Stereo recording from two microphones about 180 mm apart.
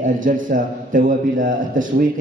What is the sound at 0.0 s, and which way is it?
A man's voice, 45° right (ahead or behind).